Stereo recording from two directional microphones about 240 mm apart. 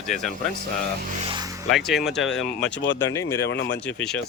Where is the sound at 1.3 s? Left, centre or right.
Centre.